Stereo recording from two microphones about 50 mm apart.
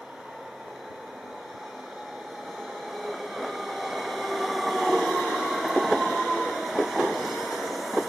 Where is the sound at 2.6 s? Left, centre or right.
Centre.